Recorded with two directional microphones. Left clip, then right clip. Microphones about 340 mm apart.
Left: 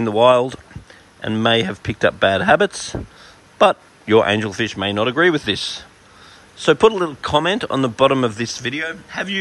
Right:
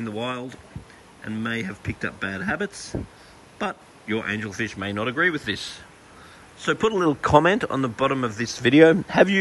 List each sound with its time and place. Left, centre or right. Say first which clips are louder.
0.0 s speech: left 17 dB; centre
2.9 s speech: left 3 dB; right
4.0 s a man's voice: left 13 dB; centre